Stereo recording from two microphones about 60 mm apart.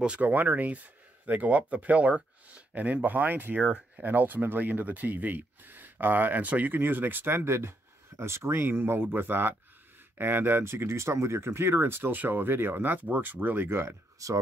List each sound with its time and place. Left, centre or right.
0.0 s speech: right
7.3 s speech: right
10.6 s speech: right
14.2 s speech: right